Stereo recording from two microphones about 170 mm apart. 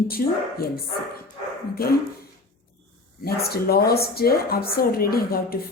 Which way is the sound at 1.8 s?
60° left (ahead or behind).